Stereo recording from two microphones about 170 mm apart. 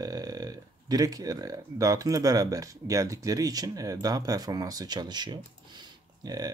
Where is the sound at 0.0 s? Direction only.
20° right (ahead or behind).